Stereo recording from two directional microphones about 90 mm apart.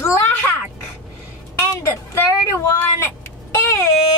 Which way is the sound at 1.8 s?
30° left (ahead or behind).